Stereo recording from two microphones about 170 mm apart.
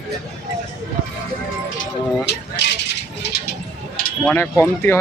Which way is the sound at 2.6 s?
90° left.